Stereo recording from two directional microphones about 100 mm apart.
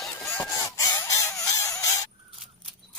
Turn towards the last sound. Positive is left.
turn(degrees=35)  # may be behind; listen again after turning